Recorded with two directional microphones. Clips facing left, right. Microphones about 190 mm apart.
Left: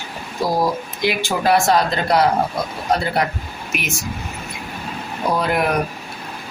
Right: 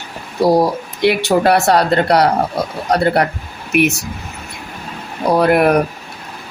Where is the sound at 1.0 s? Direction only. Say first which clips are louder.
Right 6 dB; 65° right (ahead or behind).